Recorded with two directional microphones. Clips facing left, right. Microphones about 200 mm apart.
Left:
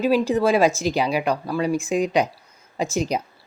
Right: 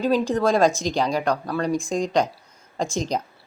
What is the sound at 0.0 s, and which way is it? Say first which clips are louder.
Speech: left 2 dB; 5° left (ahead or behind).